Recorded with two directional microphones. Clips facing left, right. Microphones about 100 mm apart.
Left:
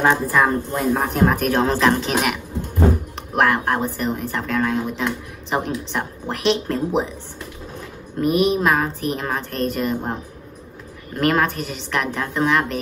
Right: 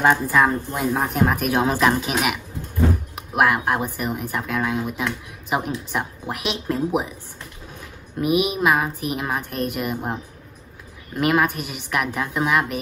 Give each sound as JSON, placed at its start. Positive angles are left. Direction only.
{"t": 0.0, "sound": "speech", "side_deg": 0}
{"t": 3.2, "sound": "speech", "side_deg": -10}
{"t": 8.2, "sound": "speech", "side_deg": -10}
{"t": 11.1, "sound": "speech", "side_deg": -10}